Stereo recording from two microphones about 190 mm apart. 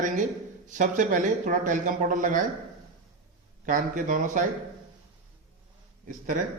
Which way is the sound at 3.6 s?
45° right (ahead or behind).